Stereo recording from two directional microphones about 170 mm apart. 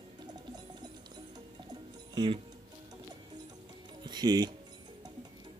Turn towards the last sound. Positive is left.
turn(degrees=-25)  # may be behind; listen again after turning